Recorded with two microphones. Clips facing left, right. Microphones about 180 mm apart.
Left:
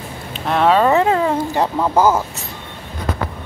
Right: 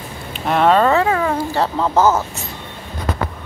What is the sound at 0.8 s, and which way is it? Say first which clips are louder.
Speech: left 1 dB; 20° left (ahead or behind).